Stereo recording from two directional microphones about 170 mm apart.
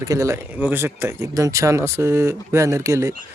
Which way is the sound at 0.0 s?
20° right (ahead or behind).